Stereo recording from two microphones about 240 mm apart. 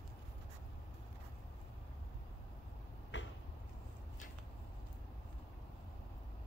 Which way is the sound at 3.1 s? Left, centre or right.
Left.